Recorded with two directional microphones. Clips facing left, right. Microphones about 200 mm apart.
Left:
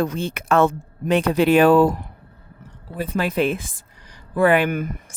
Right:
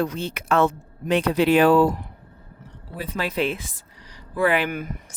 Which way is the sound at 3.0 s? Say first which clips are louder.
Left 4 dB; 50° left (ahead or behind).